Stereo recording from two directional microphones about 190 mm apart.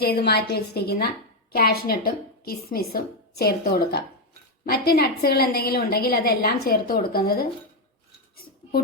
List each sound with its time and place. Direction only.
0.0 s a woman's voice: 55° left (ahead or behind)